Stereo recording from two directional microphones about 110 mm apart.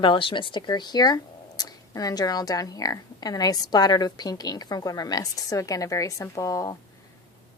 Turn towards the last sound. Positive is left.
turn(degrees=30)  # may be behind; listen again after turning